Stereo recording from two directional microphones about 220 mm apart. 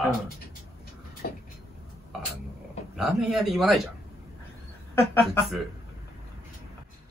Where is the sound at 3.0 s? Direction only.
Centre (ahead or behind).